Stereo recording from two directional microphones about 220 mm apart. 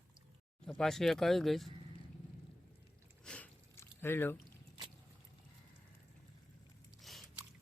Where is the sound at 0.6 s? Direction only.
Centre (ahead or behind).